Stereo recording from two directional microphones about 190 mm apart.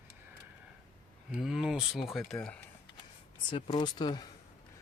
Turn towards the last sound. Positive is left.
turn(degrees=20)  # may be behind; listen again after turning